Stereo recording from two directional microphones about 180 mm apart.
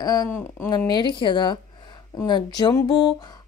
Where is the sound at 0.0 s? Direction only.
20° left (ahead or behind).